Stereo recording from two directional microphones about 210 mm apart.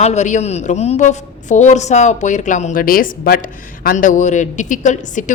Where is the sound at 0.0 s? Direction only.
35° left (ahead or behind).